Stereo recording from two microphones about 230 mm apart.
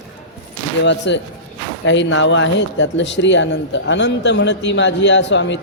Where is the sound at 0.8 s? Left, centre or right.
Left.